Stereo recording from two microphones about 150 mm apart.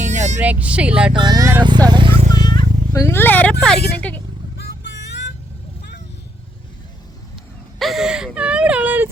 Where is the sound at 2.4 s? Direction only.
30° left (ahead or behind); by 4.2 s 5° left (ahead or behind).